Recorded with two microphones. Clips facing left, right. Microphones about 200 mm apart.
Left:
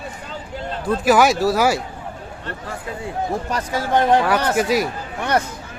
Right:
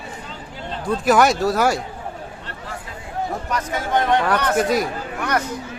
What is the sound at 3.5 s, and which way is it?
Speech, 30° left (ahead or behind).